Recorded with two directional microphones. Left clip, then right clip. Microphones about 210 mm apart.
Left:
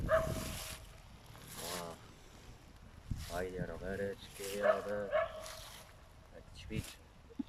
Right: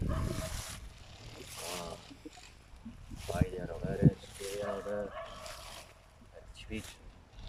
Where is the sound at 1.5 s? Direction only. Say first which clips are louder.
Right 2 dB; 10° right (ahead or behind).